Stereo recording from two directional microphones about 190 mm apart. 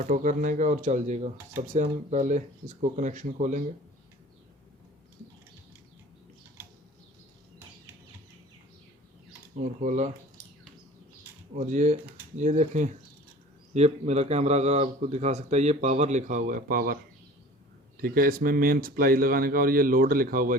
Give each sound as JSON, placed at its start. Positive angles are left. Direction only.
{"t": 0.0, "sound": "speech", "side_deg": -45}
{"t": 9.8, "sound": "speech", "side_deg": -40}
{"t": 11.5, "sound": "speech", "side_deg": -40}